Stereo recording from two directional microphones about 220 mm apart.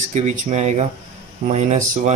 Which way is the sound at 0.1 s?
30° right (ahead or behind).